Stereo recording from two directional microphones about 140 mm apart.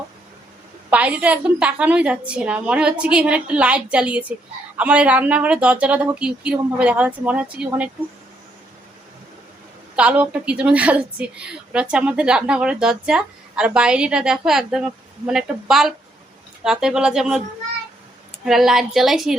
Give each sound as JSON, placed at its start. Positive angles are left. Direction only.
{"t": 0.9, "sound": "a woman's voice", "side_deg": -10}
{"t": 9.9, "sound": "a woman's voice", "side_deg": -10}
{"t": 18.4, "sound": "a woman's voice", "side_deg": -5}